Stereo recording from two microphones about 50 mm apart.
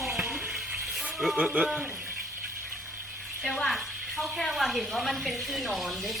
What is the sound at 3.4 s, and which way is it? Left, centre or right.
Speech, centre.